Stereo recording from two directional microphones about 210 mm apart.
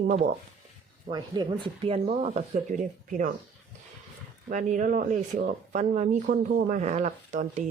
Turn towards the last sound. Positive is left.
turn(degrees=-35)  # may be behind; listen again after turning